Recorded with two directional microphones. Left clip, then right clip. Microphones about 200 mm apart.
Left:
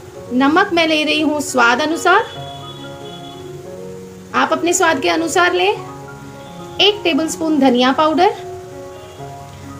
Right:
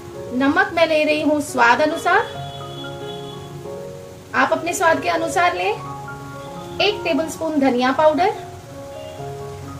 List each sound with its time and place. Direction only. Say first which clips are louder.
0.4 s a woman's voice: left 3 dB; 40° left (ahead or behind)
4.3 s a woman's voice: left 3 dB; 45° left (ahead or behind)
6.8 s a woman's voice: left 5 dB; 50° left (ahead or behind)